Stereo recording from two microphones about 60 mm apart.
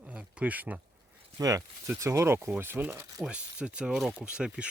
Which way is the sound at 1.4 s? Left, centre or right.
Right.